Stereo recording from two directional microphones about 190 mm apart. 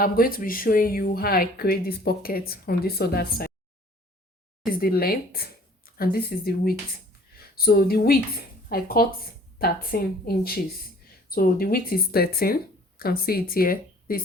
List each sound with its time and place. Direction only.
0.0 s speech: 50° left (ahead or behind)
4.8 s a woman's voice: 50° left (ahead or behind)